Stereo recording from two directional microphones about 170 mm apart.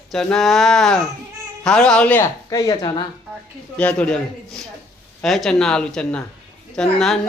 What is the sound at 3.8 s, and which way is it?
A woman's voice, 10° left (ahead or behind).